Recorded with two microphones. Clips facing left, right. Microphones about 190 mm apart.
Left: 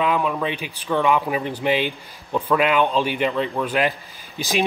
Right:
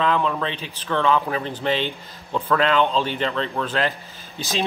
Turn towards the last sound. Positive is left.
turn(degrees=15)  # may be behind; listen again after turning